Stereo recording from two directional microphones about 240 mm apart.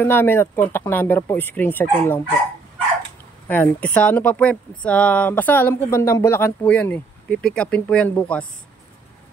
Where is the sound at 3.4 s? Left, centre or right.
Centre.